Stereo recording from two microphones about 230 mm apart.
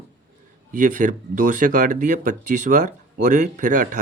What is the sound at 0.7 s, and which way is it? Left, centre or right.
Speech, right.